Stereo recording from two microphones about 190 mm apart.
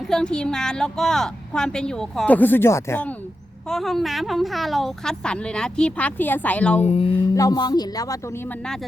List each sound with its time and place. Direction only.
0.1 s a woman's voice: 5° left (ahead or behind)
6.8 s a sound: 30° left (ahead or behind)
7.1 s speech: 15° left (ahead or behind)